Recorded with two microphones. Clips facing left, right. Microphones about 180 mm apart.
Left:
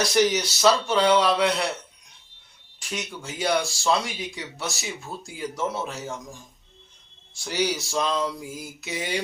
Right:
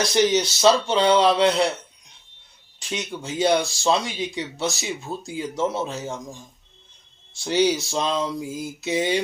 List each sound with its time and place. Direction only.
0.3 s speech: 25° right (ahead or behind)
2.9 s speech: 20° right (ahead or behind)